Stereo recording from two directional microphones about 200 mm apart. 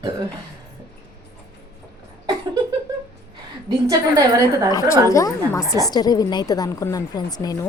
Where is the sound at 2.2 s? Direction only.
20° right (ahead or behind).